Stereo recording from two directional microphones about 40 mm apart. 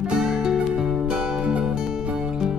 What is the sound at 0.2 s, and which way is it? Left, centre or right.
Music, centre.